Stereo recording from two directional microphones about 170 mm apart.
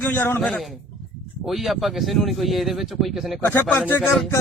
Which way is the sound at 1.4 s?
Centre (ahead or behind).